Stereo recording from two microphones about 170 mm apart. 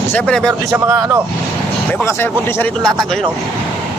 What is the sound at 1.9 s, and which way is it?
A man's voice, 10° left (ahead or behind).